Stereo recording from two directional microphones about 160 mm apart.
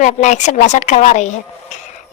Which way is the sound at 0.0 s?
50° left (ahead or behind).